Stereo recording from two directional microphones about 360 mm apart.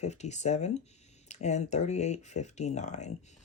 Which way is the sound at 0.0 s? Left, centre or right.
Centre.